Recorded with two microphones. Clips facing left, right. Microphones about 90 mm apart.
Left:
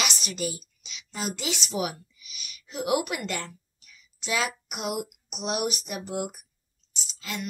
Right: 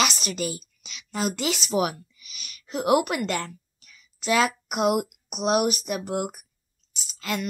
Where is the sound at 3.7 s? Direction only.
60° right (ahead or behind).